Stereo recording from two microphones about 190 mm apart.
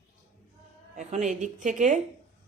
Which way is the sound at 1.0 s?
40° right (ahead or behind).